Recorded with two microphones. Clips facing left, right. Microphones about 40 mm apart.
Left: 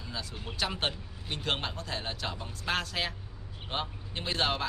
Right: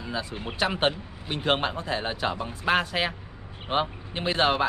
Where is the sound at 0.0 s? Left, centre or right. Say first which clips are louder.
Right 8 dB; right.